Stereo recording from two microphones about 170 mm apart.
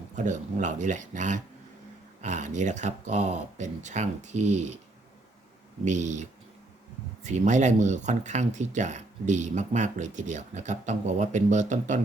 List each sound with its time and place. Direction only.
0.2 s speech: 45° right (ahead or behind)
5.8 s speech: 45° right (ahead or behind)
7.3 s speech: 45° right (ahead or behind)